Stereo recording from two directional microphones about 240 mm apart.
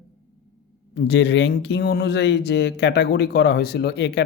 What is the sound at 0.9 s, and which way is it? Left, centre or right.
Speech, left.